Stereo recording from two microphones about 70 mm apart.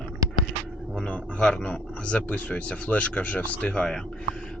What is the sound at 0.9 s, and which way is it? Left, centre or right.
Speech, centre.